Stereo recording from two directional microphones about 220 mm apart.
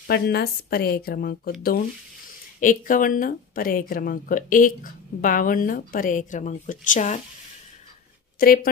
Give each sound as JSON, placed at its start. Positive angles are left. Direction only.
{"t": 0.1, "sound": "speech", "side_deg": 45}